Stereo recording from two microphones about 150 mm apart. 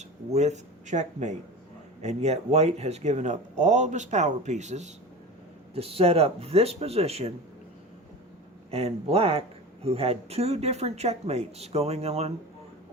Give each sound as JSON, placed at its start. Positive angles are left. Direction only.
{"t": 0.0, "sound": "speech", "side_deg": -50}
{"t": 8.7, "sound": "speech", "side_deg": -40}